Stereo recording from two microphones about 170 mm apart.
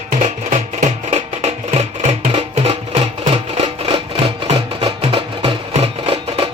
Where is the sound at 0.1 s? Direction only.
45° right (ahead or behind).